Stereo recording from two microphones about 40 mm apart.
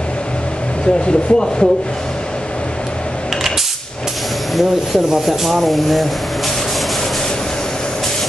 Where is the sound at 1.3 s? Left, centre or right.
Centre.